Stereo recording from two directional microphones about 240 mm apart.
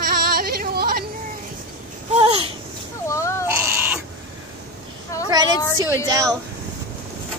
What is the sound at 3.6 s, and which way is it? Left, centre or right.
Crow, centre.